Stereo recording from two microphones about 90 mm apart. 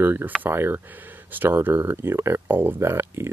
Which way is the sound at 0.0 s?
25° right (ahead or behind).